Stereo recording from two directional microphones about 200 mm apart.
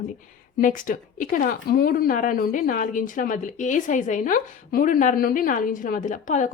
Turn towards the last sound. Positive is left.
turn(degrees=40)  # may be behind; listen again after turning